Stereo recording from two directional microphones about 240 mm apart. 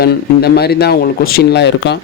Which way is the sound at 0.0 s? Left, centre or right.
Left.